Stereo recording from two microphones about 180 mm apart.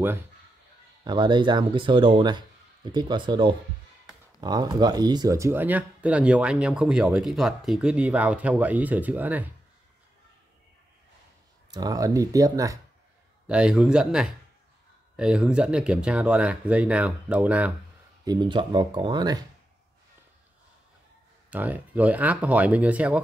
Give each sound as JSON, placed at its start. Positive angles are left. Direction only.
{"t": 1.0, "sound": "speech", "side_deg": -25}
{"t": 11.7, "sound": "speech", "side_deg": -20}
{"t": 13.5, "sound": "speech", "side_deg": -5}
{"t": 18.2, "sound": "speech", "side_deg": -25}
{"t": 21.5, "sound": "speech", "side_deg": -10}